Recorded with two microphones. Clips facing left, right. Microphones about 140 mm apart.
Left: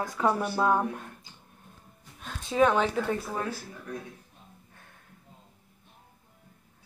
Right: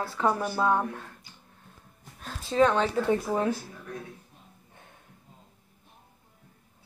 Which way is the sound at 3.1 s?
20° right (ahead or behind).